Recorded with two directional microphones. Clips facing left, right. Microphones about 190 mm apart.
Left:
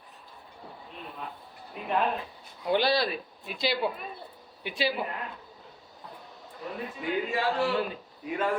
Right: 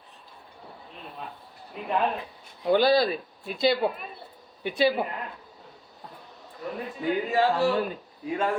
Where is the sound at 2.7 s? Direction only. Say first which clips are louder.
Right 5 dB; 45° right (ahead or behind).